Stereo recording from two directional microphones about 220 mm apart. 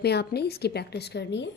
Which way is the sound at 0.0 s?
50° left (ahead or behind).